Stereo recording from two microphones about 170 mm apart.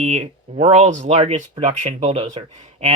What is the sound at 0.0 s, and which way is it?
Speech, 40° right (ahead or behind).